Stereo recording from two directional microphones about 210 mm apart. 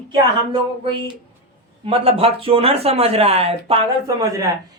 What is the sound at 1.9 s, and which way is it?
Speech, 25° right (ahead or behind).